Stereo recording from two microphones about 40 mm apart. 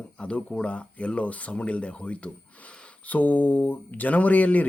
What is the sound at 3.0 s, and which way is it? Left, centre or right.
Speech, left.